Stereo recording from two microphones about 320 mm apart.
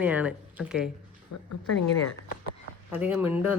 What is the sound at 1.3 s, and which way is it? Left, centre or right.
Speech, left.